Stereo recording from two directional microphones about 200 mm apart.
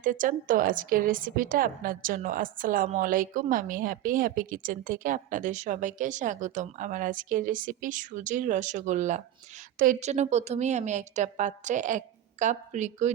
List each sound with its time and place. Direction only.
0.0 s a woman's voice: 40° right (ahead or behind)